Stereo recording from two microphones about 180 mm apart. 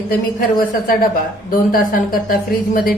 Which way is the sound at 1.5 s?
55° left (ahead or behind).